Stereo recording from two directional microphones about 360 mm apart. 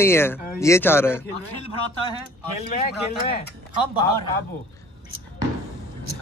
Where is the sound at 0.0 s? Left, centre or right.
Centre.